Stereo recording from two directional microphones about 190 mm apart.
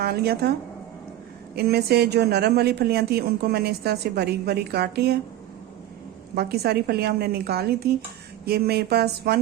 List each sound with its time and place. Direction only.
0.0 s speech: 55° right (ahead or behind)
1.5 s speech: 55° right (ahead or behind)
6.3 s speech: 55° right (ahead or behind)